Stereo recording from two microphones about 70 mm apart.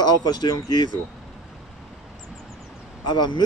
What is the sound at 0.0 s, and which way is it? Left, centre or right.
Speech, left.